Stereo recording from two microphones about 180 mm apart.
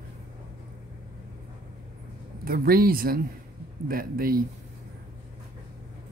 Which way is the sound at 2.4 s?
55° right (ahead or behind).